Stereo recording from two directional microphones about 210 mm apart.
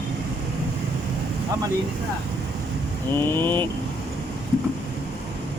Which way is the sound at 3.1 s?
10° left (ahead or behind).